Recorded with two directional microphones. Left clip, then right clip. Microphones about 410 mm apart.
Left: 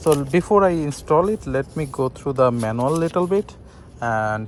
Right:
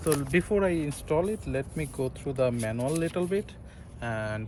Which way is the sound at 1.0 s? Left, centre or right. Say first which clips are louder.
Left 11 dB; centre.